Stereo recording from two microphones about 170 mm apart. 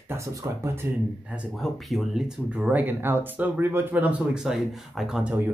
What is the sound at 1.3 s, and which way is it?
Speech, 5° right (ahead or behind).